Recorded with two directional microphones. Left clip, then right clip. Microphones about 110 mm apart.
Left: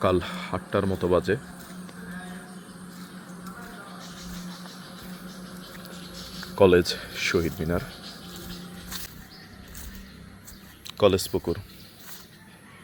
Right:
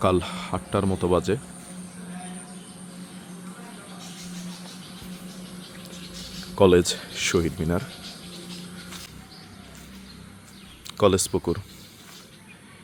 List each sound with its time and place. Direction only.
0.0 s speech: 35° right (ahead or behind)
6.6 s speech: 35° right (ahead or behind)
10.8 s speech: 40° right (ahead or behind)